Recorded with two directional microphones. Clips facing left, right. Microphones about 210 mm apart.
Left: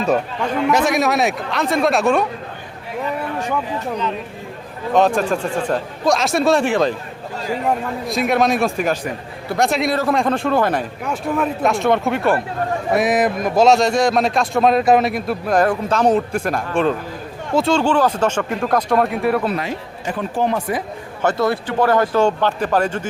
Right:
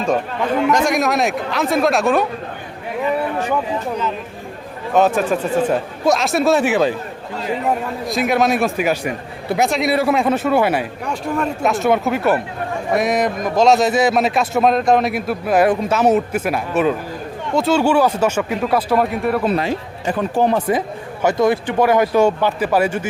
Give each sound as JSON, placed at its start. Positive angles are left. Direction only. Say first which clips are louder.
{"t": 0.7, "sound": "a man's voice", "louder": "even", "side_deg": 5}
{"t": 4.9, "sound": "a man's voice", "louder": "right 1 dB", "side_deg": -5}
{"t": 8.0, "sound": "a man's voice", "louder": "even", "side_deg": 0}
{"t": 11.0, "sound": "a man's voice", "louder": "left 1 dB", "side_deg": 5}
{"t": 20.4, "sound": "speech", "louder": "right 3 dB", "side_deg": -30}
{"t": 21.2, "sound": "a man's voice", "louder": "right 3 dB", "side_deg": -15}